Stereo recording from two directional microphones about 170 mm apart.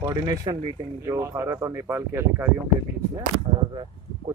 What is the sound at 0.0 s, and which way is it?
Speech, 20° right (ahead or behind).